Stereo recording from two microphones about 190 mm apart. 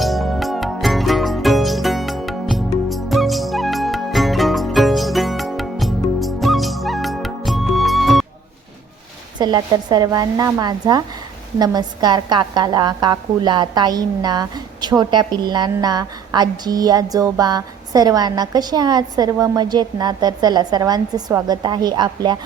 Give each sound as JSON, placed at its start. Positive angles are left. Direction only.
{"t": 0.0, "sound": "music", "side_deg": 0}
{"t": 9.4, "sound": "a woman's voice", "side_deg": -20}